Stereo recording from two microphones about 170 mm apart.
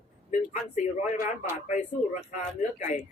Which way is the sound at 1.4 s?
45° left (ahead or behind).